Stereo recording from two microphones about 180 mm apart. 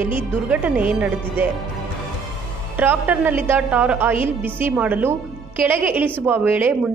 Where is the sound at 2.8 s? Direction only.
10° right (ahead or behind).